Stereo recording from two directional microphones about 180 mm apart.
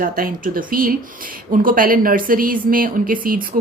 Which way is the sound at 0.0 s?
50° right (ahead or behind).